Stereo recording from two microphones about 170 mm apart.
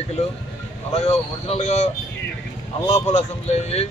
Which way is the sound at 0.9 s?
35° left (ahead or behind).